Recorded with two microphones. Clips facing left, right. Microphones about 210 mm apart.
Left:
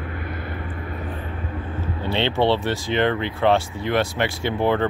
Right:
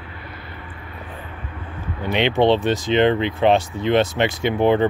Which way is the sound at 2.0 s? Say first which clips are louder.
Right 3 dB; 15° right (ahead or behind).